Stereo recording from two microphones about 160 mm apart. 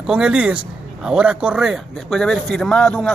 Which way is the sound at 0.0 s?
5° right (ahead or behind).